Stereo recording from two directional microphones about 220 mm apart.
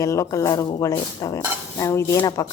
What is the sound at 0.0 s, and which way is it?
A woman's voice, 15° left (ahead or behind).